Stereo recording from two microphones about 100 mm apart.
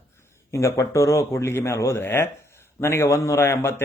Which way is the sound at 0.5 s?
30° left (ahead or behind).